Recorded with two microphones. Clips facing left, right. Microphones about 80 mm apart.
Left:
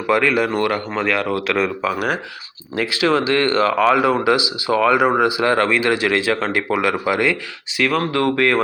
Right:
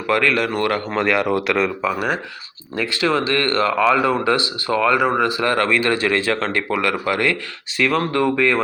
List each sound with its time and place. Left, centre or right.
0.1 s speech: centre
0.7 s speech: centre
1.5 s speech: centre
2.7 s speech: left
3.0 s speech: centre
7.8 s speech: centre